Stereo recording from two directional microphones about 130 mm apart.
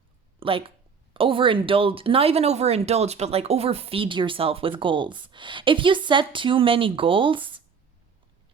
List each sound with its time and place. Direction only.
0.3 s speech: 45° right (ahead or behind)